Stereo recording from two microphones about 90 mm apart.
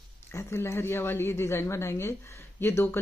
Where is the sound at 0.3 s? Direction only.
30° left (ahead or behind).